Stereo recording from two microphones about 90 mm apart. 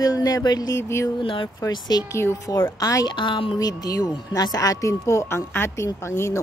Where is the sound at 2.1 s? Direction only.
30° left (ahead or behind).